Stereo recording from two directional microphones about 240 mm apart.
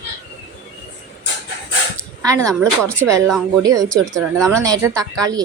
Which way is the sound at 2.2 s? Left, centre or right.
Centre.